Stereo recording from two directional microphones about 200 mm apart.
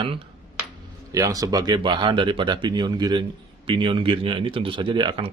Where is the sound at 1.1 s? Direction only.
15° right (ahead or behind).